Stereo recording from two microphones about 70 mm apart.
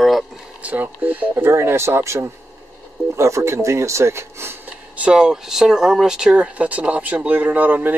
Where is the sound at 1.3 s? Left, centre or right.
Right.